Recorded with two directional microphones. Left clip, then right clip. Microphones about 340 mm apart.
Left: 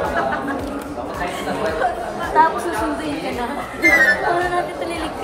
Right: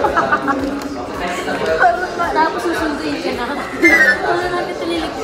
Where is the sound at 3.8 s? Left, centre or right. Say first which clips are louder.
Right 3 dB; centre.